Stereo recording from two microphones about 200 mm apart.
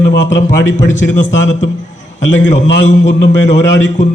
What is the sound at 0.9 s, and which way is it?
A man's voice, 65° left (ahead or behind).